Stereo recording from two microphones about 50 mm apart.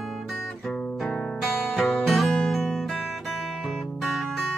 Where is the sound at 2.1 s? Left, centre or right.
Centre.